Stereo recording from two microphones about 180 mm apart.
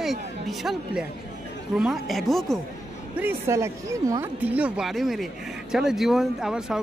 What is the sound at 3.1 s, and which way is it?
Speech, 15° right (ahead or behind).